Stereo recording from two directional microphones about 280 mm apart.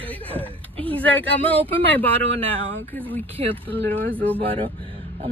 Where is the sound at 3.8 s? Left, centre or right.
Centre.